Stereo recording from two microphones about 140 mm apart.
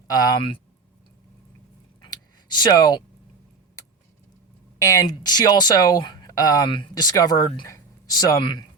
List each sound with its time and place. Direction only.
0.1 s speech: 25° left (ahead or behind)
2.0 s a sound: 30° left (ahead or behind)
4.8 s speech: 25° left (ahead or behind)